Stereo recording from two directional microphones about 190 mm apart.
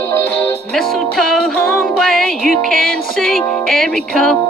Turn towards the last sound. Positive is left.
turn(degrees=5)  # may be behind; listen again after turning